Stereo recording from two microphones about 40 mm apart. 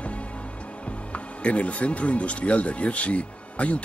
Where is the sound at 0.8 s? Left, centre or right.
Left.